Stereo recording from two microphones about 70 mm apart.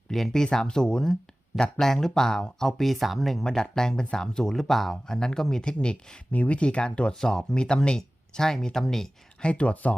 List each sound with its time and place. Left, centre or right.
0.1 s speech: centre
9.5 s speech: centre